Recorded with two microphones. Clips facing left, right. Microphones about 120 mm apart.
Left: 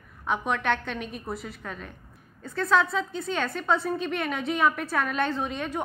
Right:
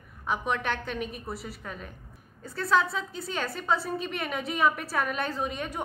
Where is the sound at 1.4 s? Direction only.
35° right (ahead or behind).